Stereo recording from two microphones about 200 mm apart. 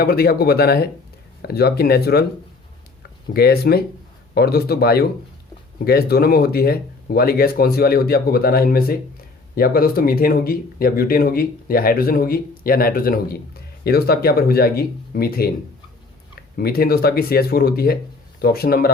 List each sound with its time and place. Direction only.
0.0 s speech: 50° left (ahead or behind)
3.3 s speech: 50° left (ahead or behind)
16.6 s speech: 50° left (ahead or behind)